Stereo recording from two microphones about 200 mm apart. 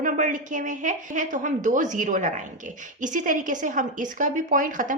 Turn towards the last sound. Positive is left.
turn(degrees=-40)  # may be behind; listen again after turning